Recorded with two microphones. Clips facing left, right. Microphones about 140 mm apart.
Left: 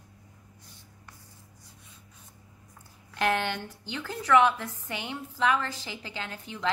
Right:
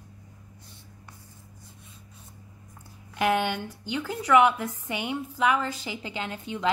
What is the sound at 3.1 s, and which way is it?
A woman's voice, 10° right (ahead or behind).